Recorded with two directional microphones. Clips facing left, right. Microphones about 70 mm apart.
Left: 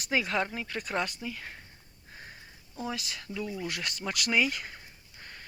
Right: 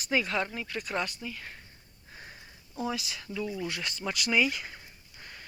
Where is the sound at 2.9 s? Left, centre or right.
Left.